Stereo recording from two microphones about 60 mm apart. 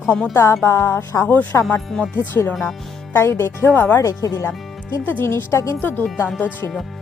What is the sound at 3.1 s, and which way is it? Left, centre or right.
Speech, left.